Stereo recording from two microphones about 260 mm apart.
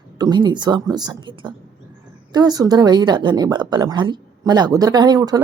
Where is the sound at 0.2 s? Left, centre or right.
Centre.